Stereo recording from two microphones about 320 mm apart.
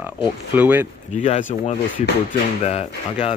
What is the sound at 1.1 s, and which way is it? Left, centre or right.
Speech, left.